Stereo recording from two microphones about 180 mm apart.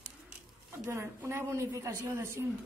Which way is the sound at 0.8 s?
15° right (ahead or behind).